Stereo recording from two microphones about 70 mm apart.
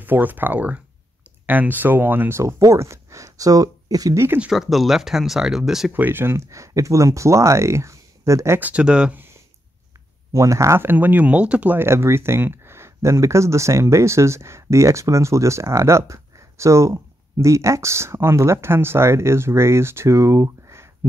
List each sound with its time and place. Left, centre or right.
0.0 s speech: right
2.4 s speech: right
4.1 s speech: right
4.5 s speech: centre
5.9 s speech: right
8.5 s speech: centre
10.3 s speech: right
10.8 s speech: right
11.8 s speech: right